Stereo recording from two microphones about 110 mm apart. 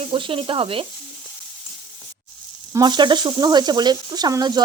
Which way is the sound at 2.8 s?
45° right (ahead or behind).